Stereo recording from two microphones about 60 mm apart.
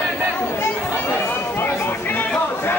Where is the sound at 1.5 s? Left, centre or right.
Left.